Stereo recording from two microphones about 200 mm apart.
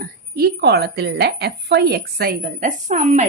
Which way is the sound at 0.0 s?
50° right (ahead or behind).